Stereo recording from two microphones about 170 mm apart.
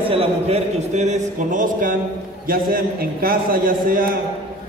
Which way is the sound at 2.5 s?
60° right (ahead or behind).